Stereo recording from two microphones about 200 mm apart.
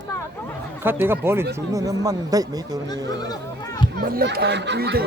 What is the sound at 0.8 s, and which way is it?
Speech, 10° right (ahead or behind).